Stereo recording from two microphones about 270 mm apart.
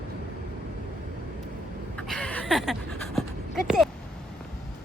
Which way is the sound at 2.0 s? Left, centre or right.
Centre.